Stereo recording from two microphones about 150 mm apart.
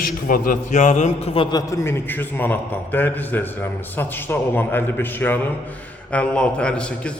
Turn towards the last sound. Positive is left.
turn(degrees=5)  # may be behind; listen again after turning